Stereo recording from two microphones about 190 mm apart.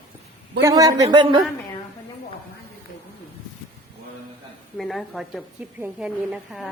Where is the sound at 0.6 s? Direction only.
20° right (ahead or behind).